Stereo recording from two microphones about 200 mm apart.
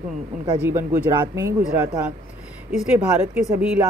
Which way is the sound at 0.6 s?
15° right (ahead or behind).